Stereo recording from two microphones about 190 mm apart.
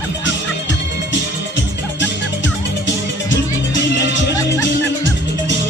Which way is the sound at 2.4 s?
75° left (ahead or behind).